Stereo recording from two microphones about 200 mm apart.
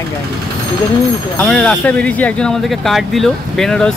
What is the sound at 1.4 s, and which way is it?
Speech, 5° left (ahead or behind).